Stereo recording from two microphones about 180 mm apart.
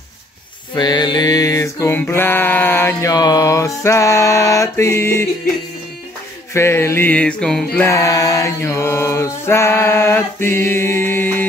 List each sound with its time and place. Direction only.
0.7 s mantra: 25° left (ahead or behind)
6.5 s mantra: 15° left (ahead or behind)